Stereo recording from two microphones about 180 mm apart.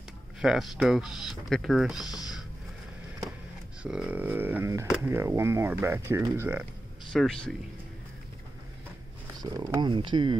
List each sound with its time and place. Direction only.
0.4 s speech: centre (ahead or behind)
2.0 s speech: 20° left (ahead or behind)
3.8 s speech: 5° right (ahead or behind)
4.8 s speech: 5° right (ahead or behind)
5.1 s speech: 15° right (ahead or behind)
7.1 s speech: centre (ahead or behind)
9.4 s speech: 20° right (ahead or behind)